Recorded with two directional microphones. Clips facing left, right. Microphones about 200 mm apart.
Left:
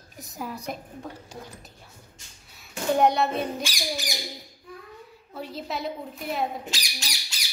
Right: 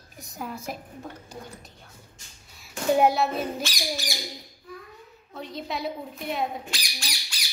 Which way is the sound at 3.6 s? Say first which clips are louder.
Even; 15° left (ahead or behind).